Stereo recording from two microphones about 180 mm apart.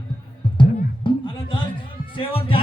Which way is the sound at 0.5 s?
25° left (ahead or behind).